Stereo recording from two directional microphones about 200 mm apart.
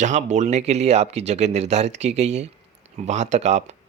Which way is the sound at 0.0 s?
35° right (ahead or behind).